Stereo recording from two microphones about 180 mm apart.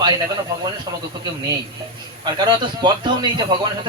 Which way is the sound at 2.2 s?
25° right (ahead or behind).